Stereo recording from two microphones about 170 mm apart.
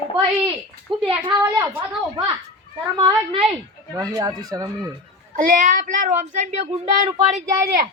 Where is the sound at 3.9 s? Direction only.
20° right (ahead or behind).